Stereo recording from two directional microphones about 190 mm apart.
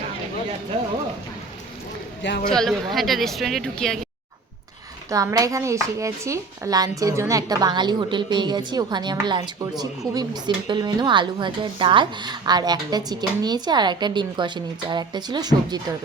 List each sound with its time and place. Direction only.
2.5 s a woman's voice: centre (ahead or behind)
5.1 s a woman's voice: 20° right (ahead or behind)